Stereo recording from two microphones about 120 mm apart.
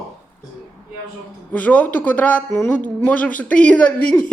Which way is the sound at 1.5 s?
10° left (ahead or behind).